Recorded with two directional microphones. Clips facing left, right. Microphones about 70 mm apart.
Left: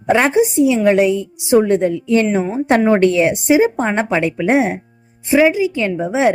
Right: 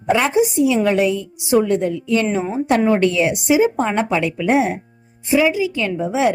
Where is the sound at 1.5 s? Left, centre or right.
Left.